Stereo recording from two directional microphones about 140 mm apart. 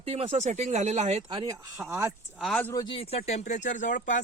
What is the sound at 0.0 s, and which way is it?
Speech, 50° right (ahead or behind).